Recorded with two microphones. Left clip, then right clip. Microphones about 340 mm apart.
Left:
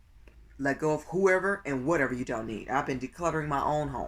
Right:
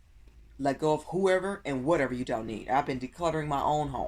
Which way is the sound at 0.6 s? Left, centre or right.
Centre.